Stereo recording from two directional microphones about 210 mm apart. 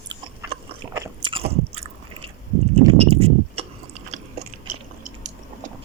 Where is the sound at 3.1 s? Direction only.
25° right (ahead or behind).